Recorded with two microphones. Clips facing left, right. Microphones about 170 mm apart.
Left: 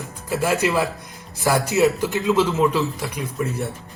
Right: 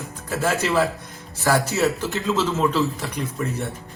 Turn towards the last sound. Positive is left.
turn(degrees=15)  # may be behind; listen again after turning